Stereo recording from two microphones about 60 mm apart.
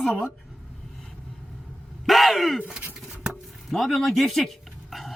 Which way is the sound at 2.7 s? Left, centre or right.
Right.